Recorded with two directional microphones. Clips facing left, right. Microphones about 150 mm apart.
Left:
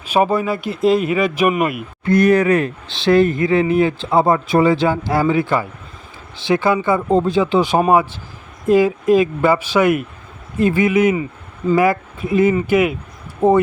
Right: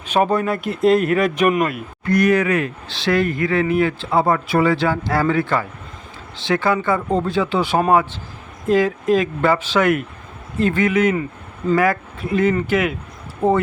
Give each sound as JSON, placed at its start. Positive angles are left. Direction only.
{"t": 0.1, "sound": "speech", "side_deg": 5}
{"t": 2.0, "sound": "speech", "side_deg": 30}
{"t": 2.8, "sound": "speech", "side_deg": 25}